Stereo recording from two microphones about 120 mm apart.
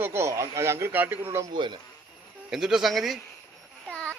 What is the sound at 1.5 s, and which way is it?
Speech, 40° right (ahead or behind).